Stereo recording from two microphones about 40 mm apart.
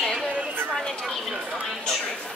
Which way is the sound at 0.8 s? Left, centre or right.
Centre.